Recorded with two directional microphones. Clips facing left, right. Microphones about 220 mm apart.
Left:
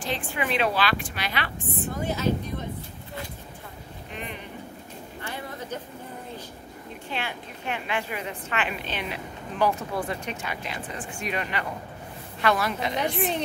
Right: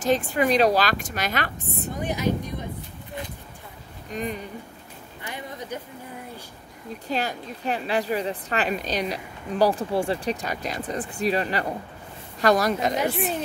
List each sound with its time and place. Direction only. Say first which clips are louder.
0.0 s a woman's voice: right 8 dB; 40° right (ahead or behind)
2.0 s speech: right 1 dB; 15° right (ahead or behind)
4.1 s a woman's voice: right 8 dB; 40° right (ahead or behind)
7.1 s a woman's voice: right 6 dB; 40° right (ahead or behind)